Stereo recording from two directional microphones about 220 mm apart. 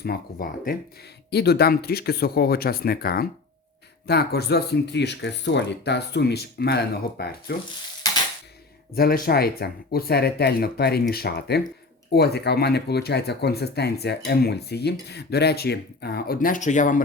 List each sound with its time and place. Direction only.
0.0 s speech: 45° left (ahead or behind)
9.0 s speech: 45° left (ahead or behind)